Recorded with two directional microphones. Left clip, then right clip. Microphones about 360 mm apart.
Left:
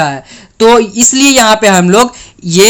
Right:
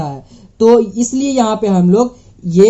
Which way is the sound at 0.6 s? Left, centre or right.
Left.